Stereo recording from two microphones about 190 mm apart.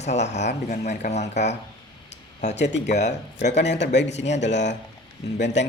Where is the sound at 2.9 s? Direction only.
40° left (ahead or behind).